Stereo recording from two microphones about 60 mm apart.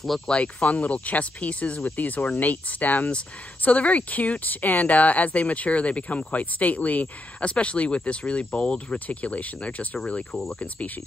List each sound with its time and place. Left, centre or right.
0.3 s speech: left